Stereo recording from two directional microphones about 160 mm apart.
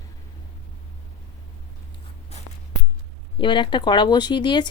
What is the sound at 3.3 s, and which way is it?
Speech, 30° left (ahead or behind).